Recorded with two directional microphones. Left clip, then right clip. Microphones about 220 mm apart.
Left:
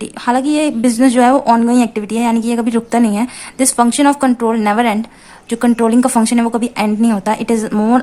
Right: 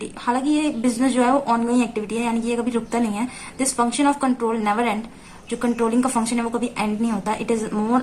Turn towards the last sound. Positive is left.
turn(degrees=50)  # may be behind; listen again after turning